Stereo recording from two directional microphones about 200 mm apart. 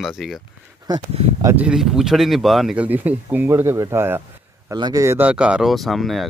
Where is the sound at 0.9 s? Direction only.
20° right (ahead or behind).